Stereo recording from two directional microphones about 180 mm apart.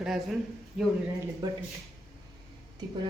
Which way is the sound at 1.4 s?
20° right (ahead or behind).